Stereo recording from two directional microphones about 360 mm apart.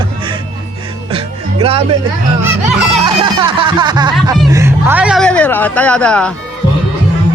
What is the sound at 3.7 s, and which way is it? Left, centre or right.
Music, centre.